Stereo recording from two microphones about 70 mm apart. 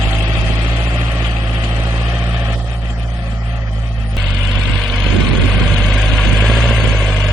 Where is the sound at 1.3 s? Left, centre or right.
Right.